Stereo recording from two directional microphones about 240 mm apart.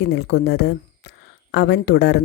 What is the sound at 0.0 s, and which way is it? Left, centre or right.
A woman's voice, left.